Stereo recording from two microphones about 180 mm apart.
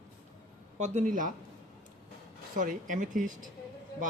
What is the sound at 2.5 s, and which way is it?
Speech, 45° right (ahead or behind).